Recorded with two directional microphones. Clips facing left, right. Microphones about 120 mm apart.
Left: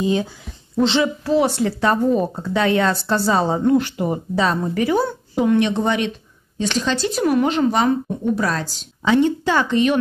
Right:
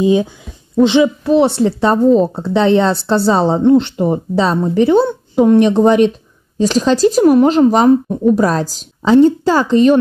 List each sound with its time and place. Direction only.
0.0 s a woman's voice: 15° right (ahead or behind)
5.4 s speech: 40° right (ahead or behind)